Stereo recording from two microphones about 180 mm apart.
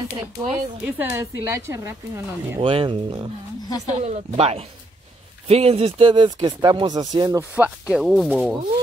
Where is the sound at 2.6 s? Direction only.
30° right (ahead or behind).